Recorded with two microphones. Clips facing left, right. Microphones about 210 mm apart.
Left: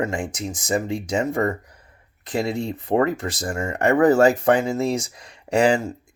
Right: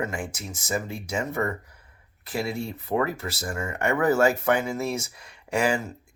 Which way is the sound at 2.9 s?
35° left (ahead or behind).